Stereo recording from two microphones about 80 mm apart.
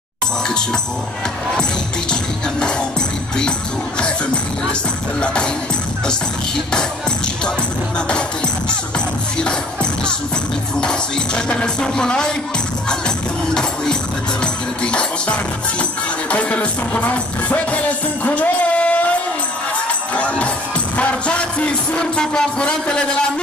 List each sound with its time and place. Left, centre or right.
5.2 s music: centre
10.8 s music: centre
14.4 s music: centre
20.2 s music: centre